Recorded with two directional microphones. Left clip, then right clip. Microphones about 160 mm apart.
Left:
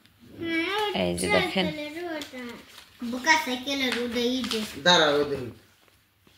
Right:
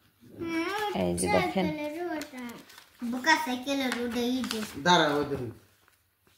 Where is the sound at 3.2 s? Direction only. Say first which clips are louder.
Left 3 dB; 35° right (ahead or behind).